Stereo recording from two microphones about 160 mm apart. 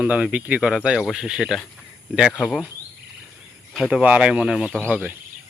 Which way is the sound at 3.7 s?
5° right (ahead or behind).